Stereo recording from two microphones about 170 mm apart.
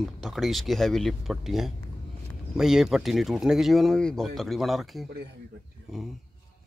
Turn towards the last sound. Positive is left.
turn(degrees=0)  # may be behind; listen again after turning